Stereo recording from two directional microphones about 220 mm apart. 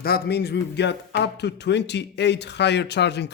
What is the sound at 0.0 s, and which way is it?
Speech, 45° left (ahead or behind).